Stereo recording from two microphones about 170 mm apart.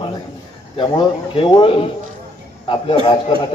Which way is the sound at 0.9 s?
30° left (ahead or behind).